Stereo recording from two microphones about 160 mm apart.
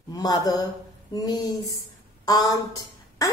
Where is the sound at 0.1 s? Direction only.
25° left (ahead or behind).